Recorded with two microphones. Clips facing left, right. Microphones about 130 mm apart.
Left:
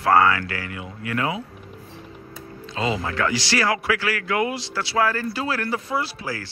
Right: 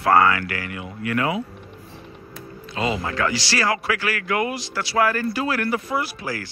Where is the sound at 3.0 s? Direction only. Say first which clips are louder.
Even; 20° right (ahead or behind).